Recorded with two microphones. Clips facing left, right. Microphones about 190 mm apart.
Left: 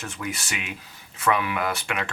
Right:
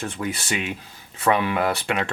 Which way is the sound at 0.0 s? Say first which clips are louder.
Right 4 dB; 30° right (ahead or behind).